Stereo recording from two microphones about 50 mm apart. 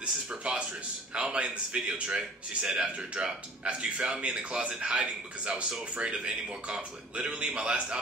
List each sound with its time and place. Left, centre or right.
0.0 s a man's voice: right